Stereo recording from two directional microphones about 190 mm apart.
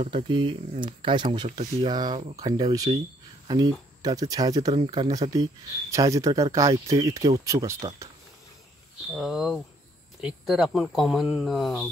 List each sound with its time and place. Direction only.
0.0 s speech: 25° right (ahead or behind)
9.1 s speech: 5° right (ahead or behind)